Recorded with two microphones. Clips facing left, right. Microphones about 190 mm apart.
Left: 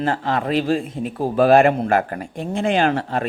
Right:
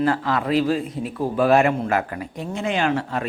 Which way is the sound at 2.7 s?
35° left (ahead or behind).